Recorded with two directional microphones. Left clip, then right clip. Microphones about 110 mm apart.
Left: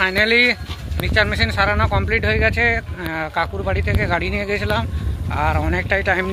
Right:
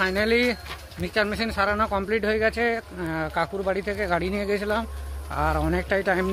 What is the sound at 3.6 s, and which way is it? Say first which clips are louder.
Speech: left 4 dB; 25° right (ahead or behind).